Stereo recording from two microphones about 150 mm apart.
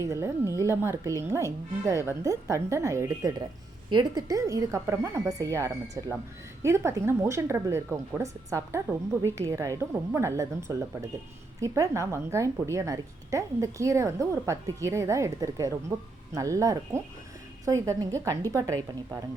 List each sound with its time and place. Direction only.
0.0 s a woman's voice: 20° right (ahead or behind)